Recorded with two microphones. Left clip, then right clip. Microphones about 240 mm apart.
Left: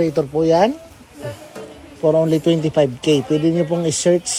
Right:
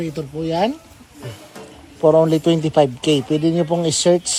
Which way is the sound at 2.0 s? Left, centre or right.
Centre.